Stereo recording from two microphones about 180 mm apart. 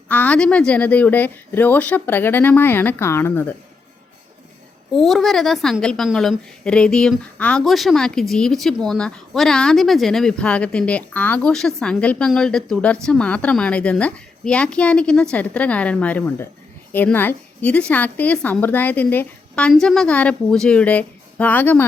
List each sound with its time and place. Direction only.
0.1 s a woman's voice: 10° left (ahead or behind)
4.9 s a woman's voice: centre (ahead or behind)